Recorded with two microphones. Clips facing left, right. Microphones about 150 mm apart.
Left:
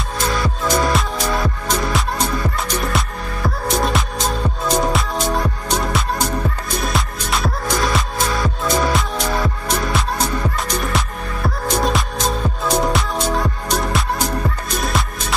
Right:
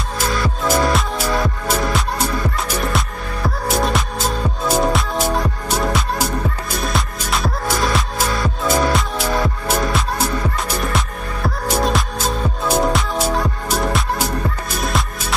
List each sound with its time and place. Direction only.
0.7 s music: 5° right (ahead or behind)
3.4 s music: centre (ahead or behind)